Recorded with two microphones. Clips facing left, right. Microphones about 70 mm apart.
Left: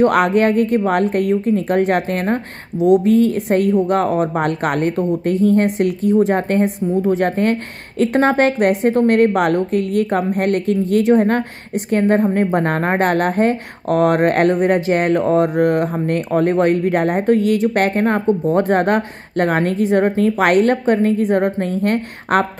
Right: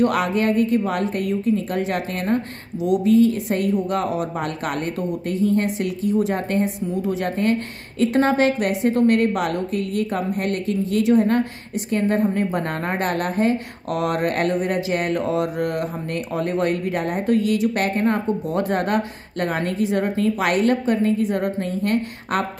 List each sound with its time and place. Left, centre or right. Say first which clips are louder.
0.0 s a woman's voice: left 6 dB; left